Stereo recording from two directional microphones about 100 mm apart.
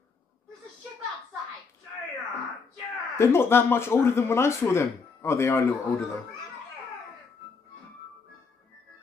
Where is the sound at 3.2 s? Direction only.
25° left (ahead or behind).